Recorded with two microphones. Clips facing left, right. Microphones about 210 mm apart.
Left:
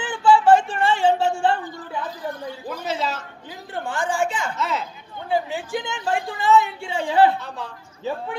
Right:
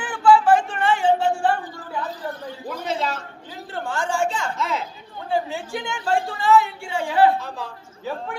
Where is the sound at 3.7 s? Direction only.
15° left (ahead or behind).